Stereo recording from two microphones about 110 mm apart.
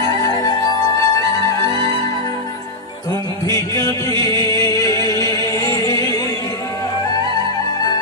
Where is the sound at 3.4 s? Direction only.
30° left (ahead or behind).